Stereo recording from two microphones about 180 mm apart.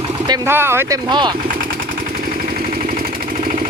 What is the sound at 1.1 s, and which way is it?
Speech, 25° right (ahead or behind).